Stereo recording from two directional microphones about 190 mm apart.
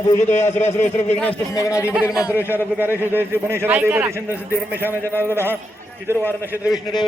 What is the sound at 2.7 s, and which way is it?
A man's voice, 10° right (ahead or behind).